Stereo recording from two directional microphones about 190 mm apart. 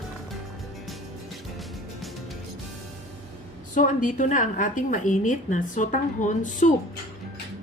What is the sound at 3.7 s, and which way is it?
A woman's voice, 45° left (ahead or behind).